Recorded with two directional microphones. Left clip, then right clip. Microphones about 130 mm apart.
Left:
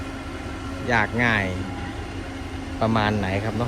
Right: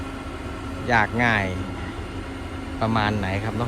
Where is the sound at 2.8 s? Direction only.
Centre (ahead or behind).